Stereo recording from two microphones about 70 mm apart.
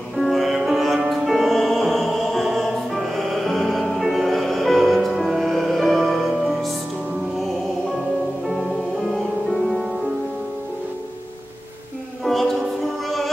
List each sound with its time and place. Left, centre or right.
0.2 s music: centre
8.5 s music: centre
12.3 s music: centre